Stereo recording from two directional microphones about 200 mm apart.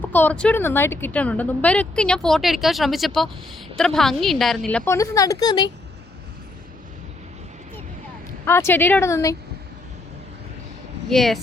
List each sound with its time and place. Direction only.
0.0 s speech: 10° left (ahead or behind)
4.9 s a woman's voice: 15° left (ahead or behind)
8.4 s a woman's voice: 10° left (ahead or behind)
11.1 s speech: centre (ahead or behind)